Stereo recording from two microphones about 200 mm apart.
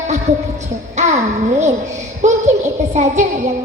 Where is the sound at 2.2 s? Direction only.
35° right (ahead or behind).